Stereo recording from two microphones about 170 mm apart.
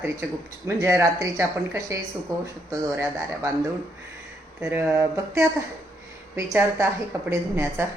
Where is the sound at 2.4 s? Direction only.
20° right (ahead or behind).